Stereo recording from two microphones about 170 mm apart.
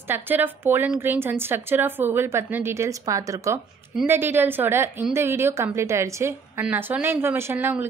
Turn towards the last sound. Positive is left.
turn(degrees=-15)  # may be behind; listen again after turning